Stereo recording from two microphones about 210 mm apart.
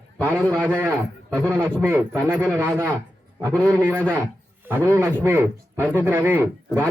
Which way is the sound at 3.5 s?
5° left (ahead or behind).